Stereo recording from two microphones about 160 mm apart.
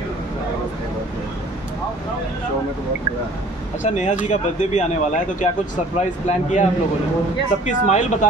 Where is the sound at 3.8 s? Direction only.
45° left (ahead or behind).